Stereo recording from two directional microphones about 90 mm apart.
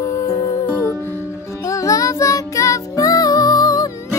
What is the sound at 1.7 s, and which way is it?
Music, 35° left (ahead or behind).